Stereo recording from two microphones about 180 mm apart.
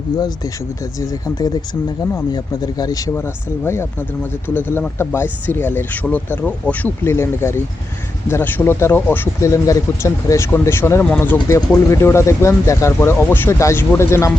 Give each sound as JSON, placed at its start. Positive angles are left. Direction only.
{"t": 0.9, "sound": "speech", "side_deg": 20}